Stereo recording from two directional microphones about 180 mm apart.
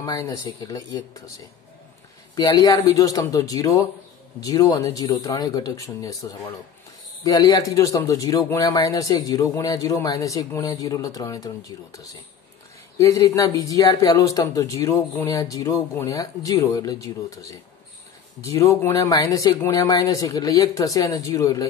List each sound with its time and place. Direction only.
0.0 s speech: 20° left (ahead or behind)
2.3 s speech: 20° left (ahead or behind)
7.2 s speech: 20° left (ahead or behind)